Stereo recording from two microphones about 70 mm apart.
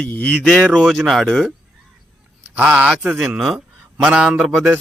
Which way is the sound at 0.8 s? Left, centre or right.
Centre.